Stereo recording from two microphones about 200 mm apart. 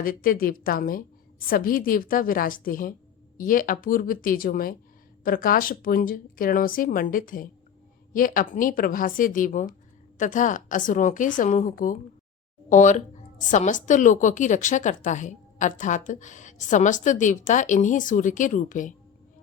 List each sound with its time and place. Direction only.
0.0 s a woman's voice: 45° left (ahead or behind)